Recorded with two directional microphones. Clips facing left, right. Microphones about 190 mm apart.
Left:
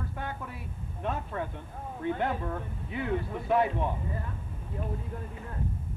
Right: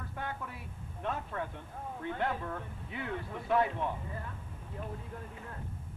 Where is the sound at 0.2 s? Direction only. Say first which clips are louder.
Even; 15° left (ahead or behind).